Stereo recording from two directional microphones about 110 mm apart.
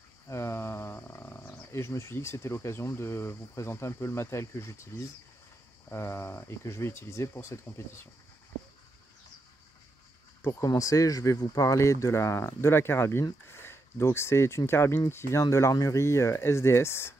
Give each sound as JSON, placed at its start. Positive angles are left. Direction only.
{"t": 0.3, "sound": "speech", "side_deg": 25}
{"t": 10.7, "sound": "speech", "side_deg": 30}